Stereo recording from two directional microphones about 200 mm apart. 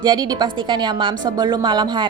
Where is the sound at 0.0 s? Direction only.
20° right (ahead or behind).